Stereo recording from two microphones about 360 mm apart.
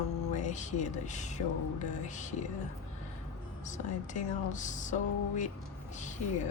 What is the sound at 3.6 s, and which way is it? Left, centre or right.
Speech, centre.